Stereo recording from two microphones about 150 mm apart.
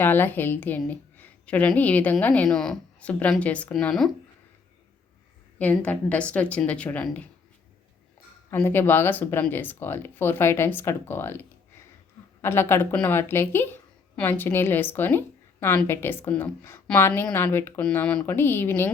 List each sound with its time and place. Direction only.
0.0 s a woman's voice: 15° left (ahead or behind)
5.5 s a woman's voice: 10° left (ahead or behind)
8.5 s a woman's voice: 15° left (ahead or behind)